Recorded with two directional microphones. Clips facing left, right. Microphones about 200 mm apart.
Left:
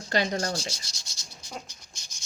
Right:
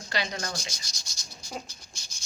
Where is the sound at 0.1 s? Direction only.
45° left (ahead or behind).